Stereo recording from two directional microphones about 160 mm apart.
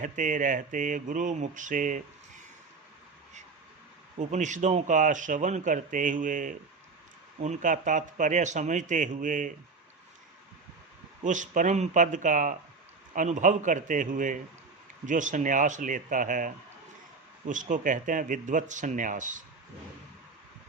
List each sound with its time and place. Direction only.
0.0 s speech: 55° right (ahead or behind)
4.2 s speech: 50° right (ahead or behind)
11.2 s speech: 50° right (ahead or behind)
17.5 s speech: 55° right (ahead or behind)